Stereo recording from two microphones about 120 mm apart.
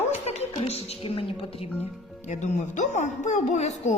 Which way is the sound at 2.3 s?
80° left.